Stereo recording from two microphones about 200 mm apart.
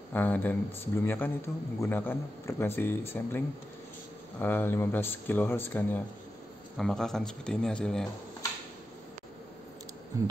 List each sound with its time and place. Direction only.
0.1 s speech: 10° left (ahead or behind)
10.1 s speech: 15° right (ahead or behind)